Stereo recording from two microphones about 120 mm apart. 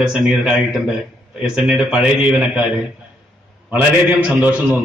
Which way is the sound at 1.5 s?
10° right (ahead or behind).